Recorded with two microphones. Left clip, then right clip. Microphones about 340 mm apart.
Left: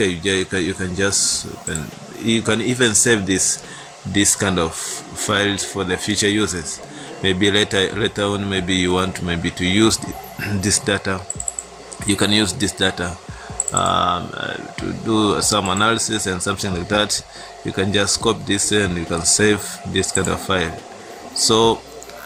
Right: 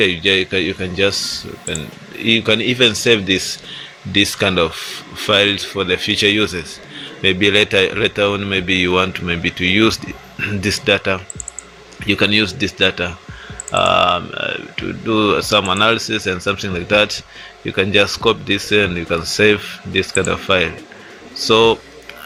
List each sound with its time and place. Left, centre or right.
0.0 s speech: centre